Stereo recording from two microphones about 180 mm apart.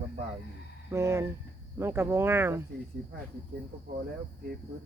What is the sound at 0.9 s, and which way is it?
Speech, 15° right (ahead or behind).